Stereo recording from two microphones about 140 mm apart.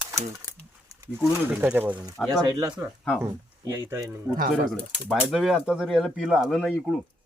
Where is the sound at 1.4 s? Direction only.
10° right (ahead or behind).